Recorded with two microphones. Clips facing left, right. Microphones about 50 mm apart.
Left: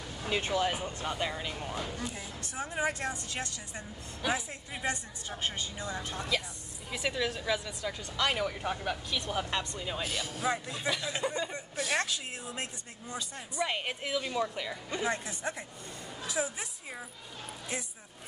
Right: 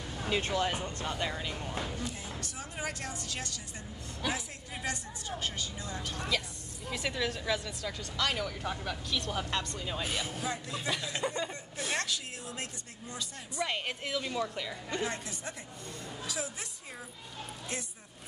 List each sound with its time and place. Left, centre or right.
0.3 s speech: centre
2.0 s speech: left
4.2 s speech: centre
4.8 s speech: left
6.9 s speech: centre
10.0 s a man's voice: right
11.1 s speech: centre
11.9 s speech: left
15.0 s speech: left